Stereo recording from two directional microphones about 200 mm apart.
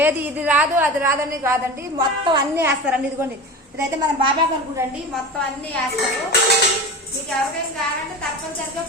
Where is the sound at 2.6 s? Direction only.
10° right (ahead or behind).